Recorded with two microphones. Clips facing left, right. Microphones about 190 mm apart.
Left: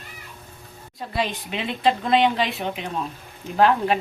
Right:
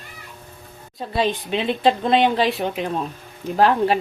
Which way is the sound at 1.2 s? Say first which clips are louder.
Right 5 dB; 30° right (ahead or behind).